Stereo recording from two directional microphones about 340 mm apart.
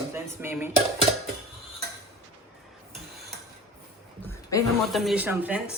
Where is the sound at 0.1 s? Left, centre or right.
Centre.